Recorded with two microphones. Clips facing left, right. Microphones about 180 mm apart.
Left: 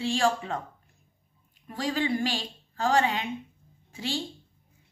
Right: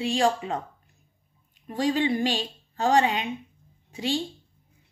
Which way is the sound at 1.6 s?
20° right (ahead or behind).